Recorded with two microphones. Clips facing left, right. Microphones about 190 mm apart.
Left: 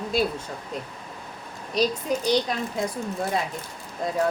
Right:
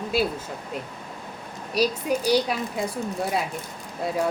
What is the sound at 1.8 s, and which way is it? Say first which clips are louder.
Speech: right 1 dB; 10° right (ahead or behind).